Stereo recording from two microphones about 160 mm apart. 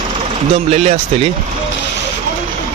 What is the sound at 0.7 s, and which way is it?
Speech, 45° right (ahead or behind).